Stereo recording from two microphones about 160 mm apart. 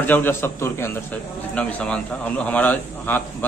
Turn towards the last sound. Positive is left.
turn(degrees=10)  # may be behind; listen again after turning